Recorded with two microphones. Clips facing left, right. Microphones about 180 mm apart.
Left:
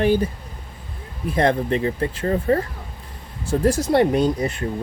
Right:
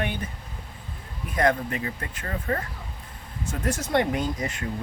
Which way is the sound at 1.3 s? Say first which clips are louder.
Left 5 dB; 30° left (ahead or behind).